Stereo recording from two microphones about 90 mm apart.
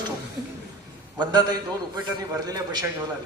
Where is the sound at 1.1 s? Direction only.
50° right (ahead or behind).